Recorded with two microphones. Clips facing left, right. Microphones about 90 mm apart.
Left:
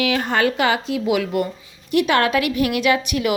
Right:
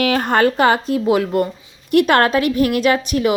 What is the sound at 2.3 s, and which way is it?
A woman's voice, 30° right (ahead or behind).